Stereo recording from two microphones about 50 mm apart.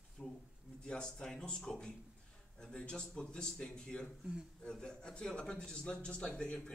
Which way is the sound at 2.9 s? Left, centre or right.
Centre.